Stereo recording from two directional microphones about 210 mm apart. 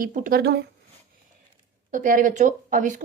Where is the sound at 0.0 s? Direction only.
40° right (ahead or behind).